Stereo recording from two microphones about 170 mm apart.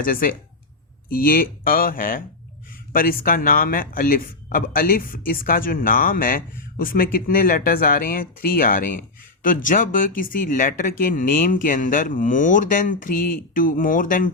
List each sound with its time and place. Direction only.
0.0 s a man's voice: 55° left (ahead or behind)